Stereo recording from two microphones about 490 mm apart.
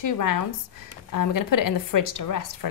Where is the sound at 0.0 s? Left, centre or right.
Left.